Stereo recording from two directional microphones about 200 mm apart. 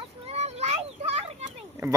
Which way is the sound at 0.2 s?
30° right (ahead or behind).